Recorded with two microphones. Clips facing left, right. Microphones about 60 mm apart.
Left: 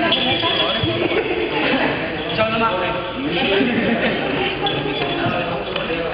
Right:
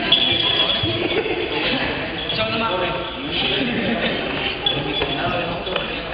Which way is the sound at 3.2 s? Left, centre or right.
Left.